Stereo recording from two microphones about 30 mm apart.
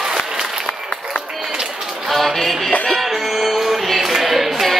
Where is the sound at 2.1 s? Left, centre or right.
Centre.